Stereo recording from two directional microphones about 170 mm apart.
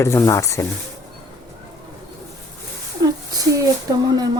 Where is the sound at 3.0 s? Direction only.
20° right (ahead or behind).